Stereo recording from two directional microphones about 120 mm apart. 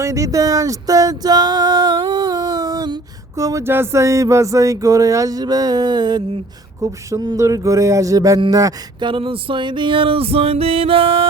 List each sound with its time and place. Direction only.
0.0 s a sound: 25° right (ahead or behind)
6.8 s music: 30° right (ahead or behind)
9.0 s music: 50° right (ahead or behind)